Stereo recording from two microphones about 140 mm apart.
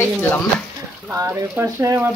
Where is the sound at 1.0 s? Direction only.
15° right (ahead or behind).